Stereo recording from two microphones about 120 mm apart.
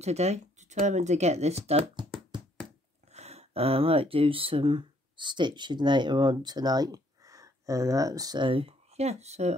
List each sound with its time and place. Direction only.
0.0 s speech: 65° right (ahead or behind)
3.1 s speech: 65° right (ahead or behind)